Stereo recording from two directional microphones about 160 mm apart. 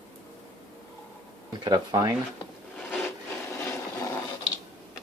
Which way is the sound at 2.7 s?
10° left (ahead or behind).